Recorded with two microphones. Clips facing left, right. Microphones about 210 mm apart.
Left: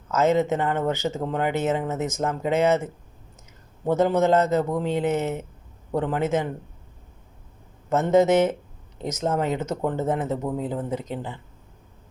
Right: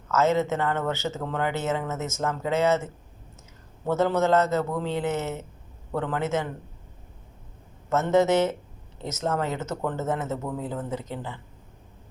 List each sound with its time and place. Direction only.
0.1 s speech: 15° left (ahead or behind)
7.9 s speech: 15° left (ahead or behind)